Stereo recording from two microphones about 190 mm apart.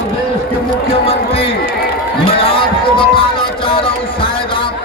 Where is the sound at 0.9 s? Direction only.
30° left (ahead or behind).